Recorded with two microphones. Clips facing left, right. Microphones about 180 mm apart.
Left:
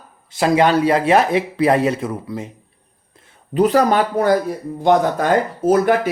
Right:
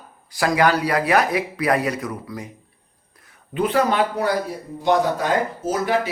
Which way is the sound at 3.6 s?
40° left (ahead or behind).